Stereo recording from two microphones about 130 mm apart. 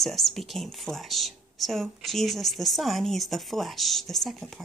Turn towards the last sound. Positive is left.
turn(degrees=0)  # may be behind; listen again after turning